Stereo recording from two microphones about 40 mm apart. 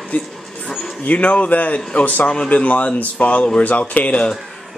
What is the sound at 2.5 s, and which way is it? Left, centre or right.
Speech, left.